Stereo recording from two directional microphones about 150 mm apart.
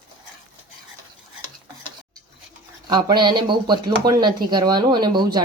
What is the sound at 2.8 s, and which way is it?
Speech, 30° right (ahead or behind).